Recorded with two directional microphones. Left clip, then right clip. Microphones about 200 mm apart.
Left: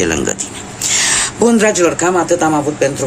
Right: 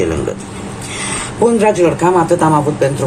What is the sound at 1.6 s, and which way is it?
Speech, 35° left (ahead or behind).